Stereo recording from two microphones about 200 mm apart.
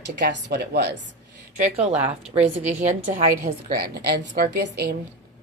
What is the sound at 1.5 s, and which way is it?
A woman's voice, 35° right (ahead or behind).